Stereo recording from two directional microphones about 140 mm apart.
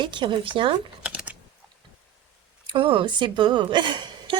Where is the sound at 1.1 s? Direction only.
10° right (ahead or behind).